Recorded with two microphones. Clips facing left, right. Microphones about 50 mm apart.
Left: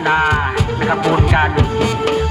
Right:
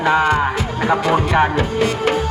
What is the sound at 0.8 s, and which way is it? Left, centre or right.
Music, centre.